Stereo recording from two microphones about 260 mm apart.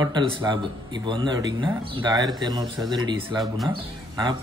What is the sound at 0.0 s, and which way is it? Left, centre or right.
Speech, centre.